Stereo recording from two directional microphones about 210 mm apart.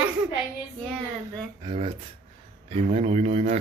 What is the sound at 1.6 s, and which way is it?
Speech, 25° right (ahead or behind).